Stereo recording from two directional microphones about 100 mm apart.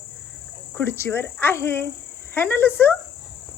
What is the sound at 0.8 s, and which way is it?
Speech, 25° left (ahead or behind).